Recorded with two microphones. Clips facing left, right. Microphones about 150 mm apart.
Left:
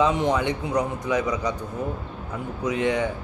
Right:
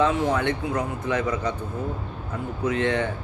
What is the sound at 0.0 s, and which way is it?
Speech, 20° left (ahead or behind).